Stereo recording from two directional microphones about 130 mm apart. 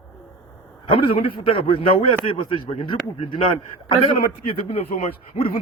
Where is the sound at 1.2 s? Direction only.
45° left (ahead or behind).